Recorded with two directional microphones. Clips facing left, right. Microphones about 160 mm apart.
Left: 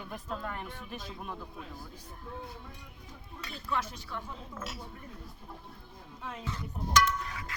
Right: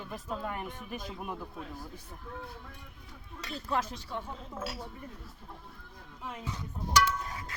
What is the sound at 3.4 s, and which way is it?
Speech, 35° right (ahead or behind).